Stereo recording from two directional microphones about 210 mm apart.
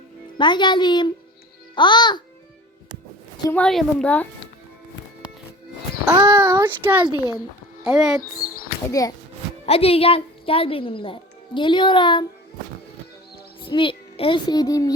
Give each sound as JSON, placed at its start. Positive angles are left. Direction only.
{"t": 0.3, "sound": "a woman's voice", "side_deg": 20}
{"t": 3.4, "sound": "a woman's voice", "side_deg": 5}
{"t": 6.1, "sound": "a sound", "side_deg": -15}
{"t": 7.9, "sound": "speech", "side_deg": -5}
{"t": 8.9, "sound": "a woman's voice", "side_deg": 15}
{"t": 9.6, "sound": "a woman's voice", "side_deg": 30}
{"t": 13.6, "sound": "a child's voice", "side_deg": 25}